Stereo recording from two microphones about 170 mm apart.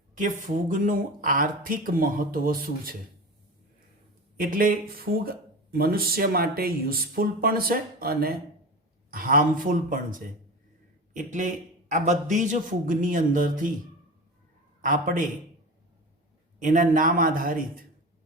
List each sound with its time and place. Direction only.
0.2 s speech: 50° right (ahead or behind)
4.4 s a man's voice: 55° right (ahead or behind)
14.8 s a man's voice: 50° right (ahead or behind)
16.6 s speech: 50° right (ahead or behind)